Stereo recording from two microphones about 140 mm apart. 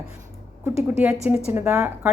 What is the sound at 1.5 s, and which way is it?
Speech, 5° right (ahead or behind).